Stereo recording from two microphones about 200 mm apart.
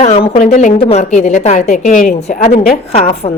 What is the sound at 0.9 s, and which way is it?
A woman's voice, 35° left (ahead or behind).